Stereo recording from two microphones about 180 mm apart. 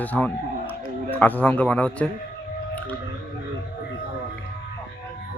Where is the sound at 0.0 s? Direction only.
10° left (ahead or behind).